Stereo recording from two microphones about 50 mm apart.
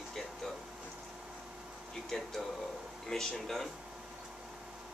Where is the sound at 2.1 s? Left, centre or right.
Centre.